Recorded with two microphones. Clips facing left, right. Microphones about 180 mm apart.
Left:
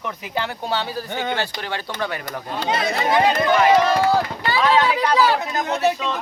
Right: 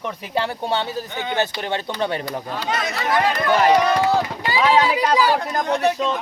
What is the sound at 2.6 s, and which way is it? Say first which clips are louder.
Speech: left 5 dB; 30° left (ahead or behind).